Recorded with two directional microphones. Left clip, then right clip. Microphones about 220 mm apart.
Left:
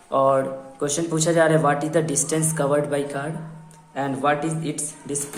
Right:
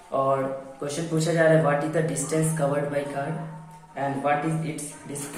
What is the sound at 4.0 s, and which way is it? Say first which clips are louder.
Speech: left 2 dB; 35° left (ahead or behind).